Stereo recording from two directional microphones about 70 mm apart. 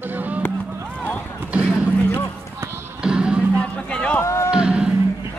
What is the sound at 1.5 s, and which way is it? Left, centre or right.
Basketball bounce, centre.